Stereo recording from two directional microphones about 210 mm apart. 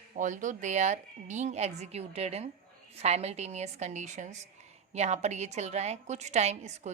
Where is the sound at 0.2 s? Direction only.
35° right (ahead or behind).